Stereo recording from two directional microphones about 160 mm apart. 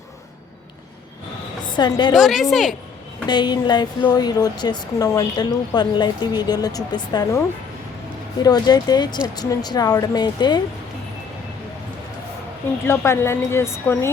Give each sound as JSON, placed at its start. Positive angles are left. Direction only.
{"t": 1.6, "sound": "a woman's voice", "side_deg": 30}
{"t": 2.1, "sound": "a woman's voice", "side_deg": 0}
{"t": 3.2, "sound": "speech", "side_deg": 25}
{"t": 12.8, "sound": "a woman's voice", "side_deg": 15}